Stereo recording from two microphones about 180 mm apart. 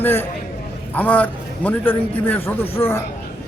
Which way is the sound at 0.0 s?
10° left (ahead or behind).